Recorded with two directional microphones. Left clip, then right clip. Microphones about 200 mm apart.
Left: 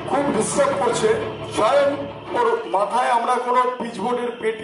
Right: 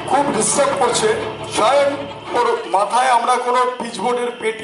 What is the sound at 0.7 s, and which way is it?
A man's voice, 20° left (ahead or behind).